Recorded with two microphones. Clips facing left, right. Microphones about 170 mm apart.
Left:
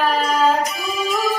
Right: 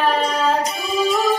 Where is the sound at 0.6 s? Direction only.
30° right (ahead or behind).